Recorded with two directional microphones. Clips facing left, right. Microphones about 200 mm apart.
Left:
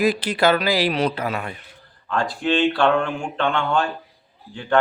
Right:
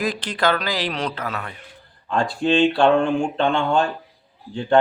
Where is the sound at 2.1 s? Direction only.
25° right (ahead or behind).